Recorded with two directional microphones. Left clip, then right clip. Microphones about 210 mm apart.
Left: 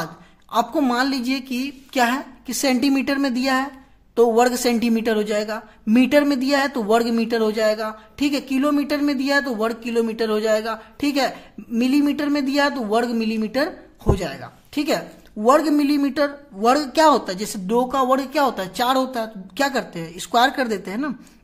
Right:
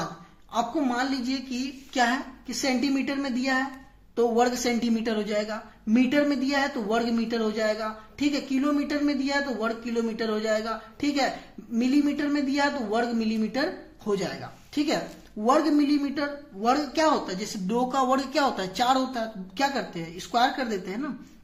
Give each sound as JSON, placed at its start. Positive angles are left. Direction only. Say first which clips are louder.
{"t": 0.5, "sound": "a woman's voice", "louder": "left 7 dB", "side_deg": 45}